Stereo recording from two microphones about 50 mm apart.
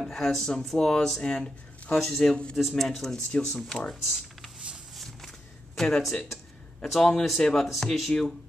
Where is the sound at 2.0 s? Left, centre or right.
Centre.